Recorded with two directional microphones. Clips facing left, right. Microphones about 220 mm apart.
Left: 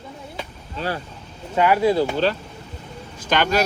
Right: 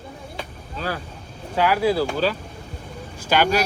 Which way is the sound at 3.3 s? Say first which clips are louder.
Right 1 dB; 10° right (ahead or behind).